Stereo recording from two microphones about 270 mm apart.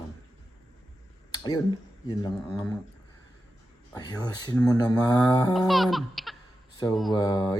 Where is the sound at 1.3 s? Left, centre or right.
Centre.